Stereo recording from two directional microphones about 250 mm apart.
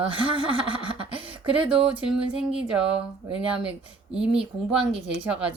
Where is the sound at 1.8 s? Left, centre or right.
Centre.